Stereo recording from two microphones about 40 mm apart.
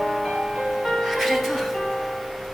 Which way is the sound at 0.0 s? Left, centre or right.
Centre.